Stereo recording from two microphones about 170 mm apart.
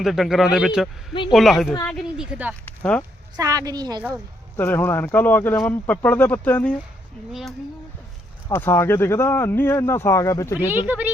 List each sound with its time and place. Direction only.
0.0 s speech: centre (ahead or behind)
2.6 s speech: 10° left (ahead or behind)
3.3 s a woman's voice: 20° right (ahead or behind)
4.5 s speech: 15° left (ahead or behind)
8.4 s speech: 15° left (ahead or behind)
10.8 s speech: 10° right (ahead or behind)